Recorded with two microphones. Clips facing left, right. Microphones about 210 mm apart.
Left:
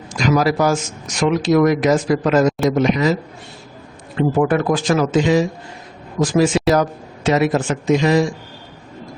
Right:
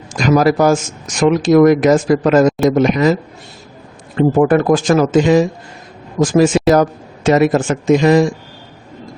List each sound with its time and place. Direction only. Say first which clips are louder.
0.1 s speech: right 4 dB; 50° right (ahead or behind)
4.2 s speech: right 5 dB; 45° right (ahead or behind)